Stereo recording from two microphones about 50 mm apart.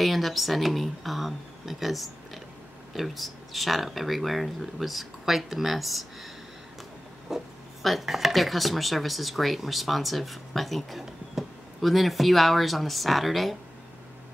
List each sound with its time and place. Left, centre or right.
0.0 s speech: centre
7.3 s speech: centre